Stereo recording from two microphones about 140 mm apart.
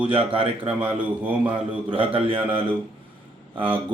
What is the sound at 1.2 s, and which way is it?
Speech, 10° right (ahead or behind).